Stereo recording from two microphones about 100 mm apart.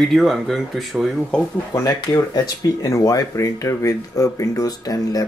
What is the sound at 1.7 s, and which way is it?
Speech, 40° left (ahead or behind).